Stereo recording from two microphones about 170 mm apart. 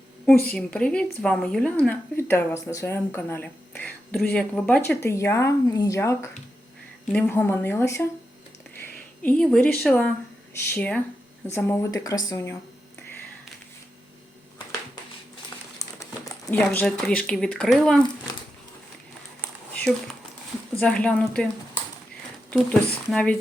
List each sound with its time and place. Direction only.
0.4 s a woman's voice: 5° left (ahead or behind)
9.2 s a woman's voice: 5° left (ahead or behind)
16.5 s speech: 10° left (ahead or behind)
20.7 s a woman's voice: 5° left (ahead or behind)
22.7 s speech: 5° left (ahead or behind)